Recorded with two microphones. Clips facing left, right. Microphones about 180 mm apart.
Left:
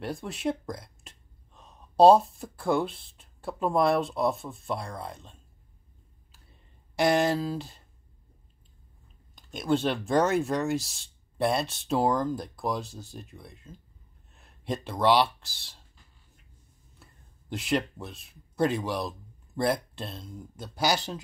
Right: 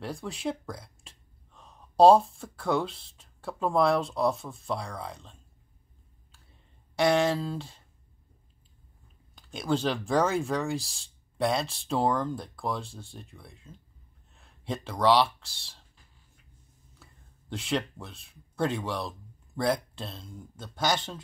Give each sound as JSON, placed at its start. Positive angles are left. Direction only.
{"t": 0.0, "sound": "speech", "side_deg": 0}
{"t": 7.0, "sound": "speech", "side_deg": 5}
{"t": 9.5, "sound": "speech", "side_deg": 0}
{"t": 17.6, "sound": "speech", "side_deg": 5}
{"t": 18.1, "sound": "speech", "side_deg": 65}
{"t": 18.7, "sound": "speech", "side_deg": 5}